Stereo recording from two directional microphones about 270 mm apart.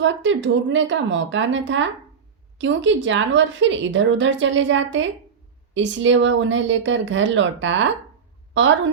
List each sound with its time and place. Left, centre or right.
0.0 s a woman's voice: right